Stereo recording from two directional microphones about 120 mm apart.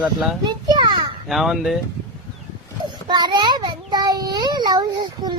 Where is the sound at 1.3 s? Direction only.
Centre (ahead or behind).